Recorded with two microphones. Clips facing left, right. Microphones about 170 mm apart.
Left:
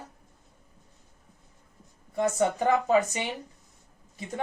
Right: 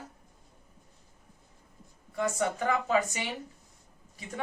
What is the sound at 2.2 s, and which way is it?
A woman's voice, 30° left (ahead or behind).